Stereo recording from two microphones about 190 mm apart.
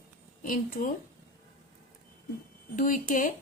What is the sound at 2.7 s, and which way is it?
Speech, 45° left (ahead or behind).